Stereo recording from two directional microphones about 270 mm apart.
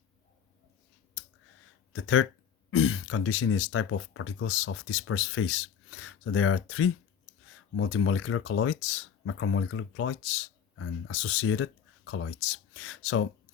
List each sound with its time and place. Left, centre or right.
1.9 s speech: left